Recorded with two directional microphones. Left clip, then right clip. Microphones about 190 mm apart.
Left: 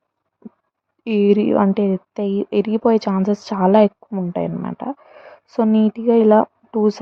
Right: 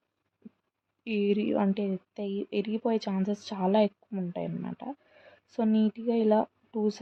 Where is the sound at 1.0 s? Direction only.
35° left (ahead or behind).